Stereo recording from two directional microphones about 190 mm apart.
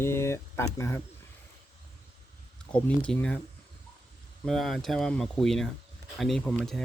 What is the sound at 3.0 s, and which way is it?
Speech, 5° left (ahead or behind).